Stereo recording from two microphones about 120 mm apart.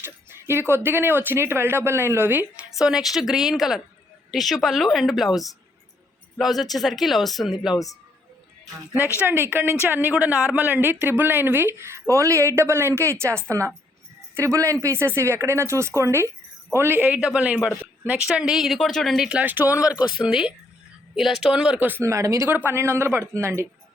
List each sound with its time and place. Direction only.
0.0 s speech: 20° right (ahead or behind)
2.7 s speech: 5° right (ahead or behind)
9.0 s speech: 20° left (ahead or behind)
9.2 s a man's voice: 20° right (ahead or behind)